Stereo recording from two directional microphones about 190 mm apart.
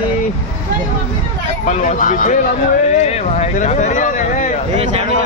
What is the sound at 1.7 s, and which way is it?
Speech, 40° left (ahead or behind).